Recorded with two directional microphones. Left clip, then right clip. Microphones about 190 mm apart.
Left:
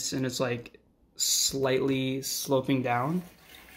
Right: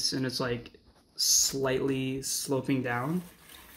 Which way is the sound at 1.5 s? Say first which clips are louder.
Left 2 dB; 20° left (ahead or behind).